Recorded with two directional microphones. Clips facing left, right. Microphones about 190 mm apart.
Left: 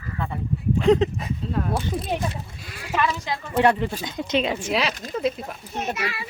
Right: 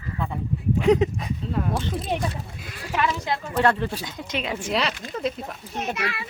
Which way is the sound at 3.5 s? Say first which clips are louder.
Left 3 dB; 15° left (ahead or behind).